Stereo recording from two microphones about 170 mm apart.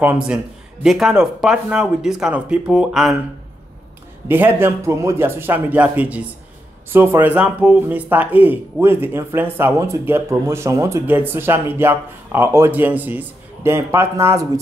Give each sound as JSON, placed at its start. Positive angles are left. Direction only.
{"t": 0.0, "sound": "speech", "side_deg": -10}
{"t": 4.3, "sound": "speech", "side_deg": -10}